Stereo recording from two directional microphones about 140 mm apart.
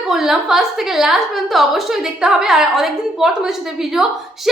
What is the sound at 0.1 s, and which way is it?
A woman's voice, 5° right (ahead or behind).